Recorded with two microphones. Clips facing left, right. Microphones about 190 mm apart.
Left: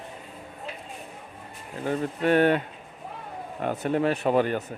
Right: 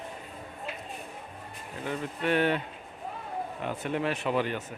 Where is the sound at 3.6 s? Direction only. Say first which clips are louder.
Left 7 dB; 40° left (ahead or behind).